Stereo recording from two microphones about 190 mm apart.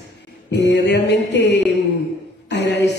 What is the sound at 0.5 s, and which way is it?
A man's voice, 65° left (ahead or behind).